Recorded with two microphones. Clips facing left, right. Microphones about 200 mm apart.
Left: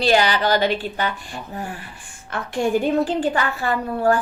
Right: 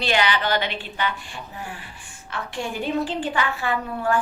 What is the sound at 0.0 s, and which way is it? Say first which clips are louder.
A woman's voice: left 5 dB; 40° left (ahead or behind).